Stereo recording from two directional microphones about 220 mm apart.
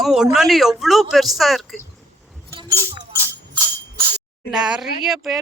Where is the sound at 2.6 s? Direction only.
15° right (ahead or behind).